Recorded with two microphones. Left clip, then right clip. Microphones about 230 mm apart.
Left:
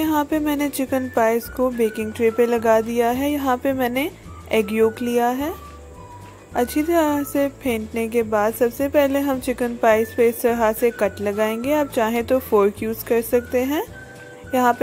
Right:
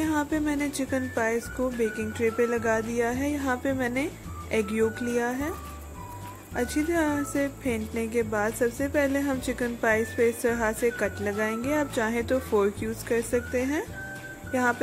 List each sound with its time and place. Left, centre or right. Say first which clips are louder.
0.0 s a woman's voice: left 6 dB; left
6.5 s a woman's voice: left 8 dB; left